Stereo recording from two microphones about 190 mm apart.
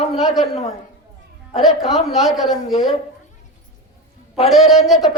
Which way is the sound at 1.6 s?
Centre (ahead or behind).